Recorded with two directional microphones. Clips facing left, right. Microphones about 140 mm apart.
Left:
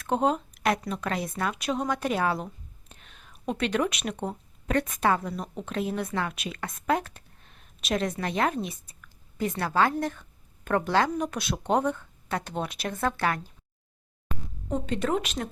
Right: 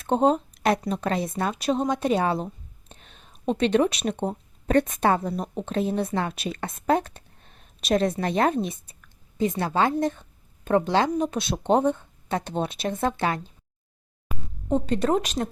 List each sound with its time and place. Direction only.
0.0 s a woman's voice: 30° right (ahead or behind)
14.3 s a sound: 10° right (ahead or behind)
14.7 s speech: 35° right (ahead or behind)